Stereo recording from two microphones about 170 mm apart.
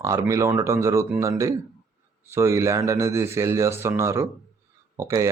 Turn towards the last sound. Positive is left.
turn(degrees=-20)  # may be behind; listen again after turning